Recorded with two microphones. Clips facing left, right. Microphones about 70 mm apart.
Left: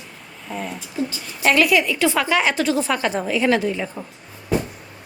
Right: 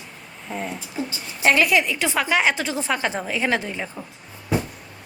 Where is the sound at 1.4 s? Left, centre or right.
Right.